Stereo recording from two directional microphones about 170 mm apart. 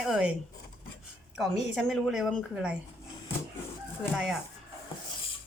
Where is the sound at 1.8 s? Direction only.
Centre (ahead or behind).